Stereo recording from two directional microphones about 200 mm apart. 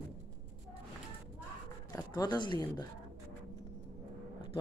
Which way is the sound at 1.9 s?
15° left (ahead or behind).